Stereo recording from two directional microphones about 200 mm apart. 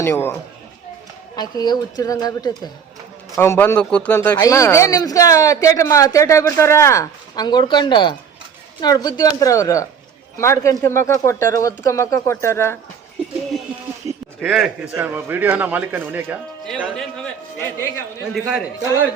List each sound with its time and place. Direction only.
0.0 s speech: 10° left (ahead or behind)
1.4 s a woman's voice: 20° left (ahead or behind)
14.1 s a man's voice: 5° right (ahead or behind)
16.6 s speech: 5° left (ahead or behind)
18.3 s speech: centre (ahead or behind)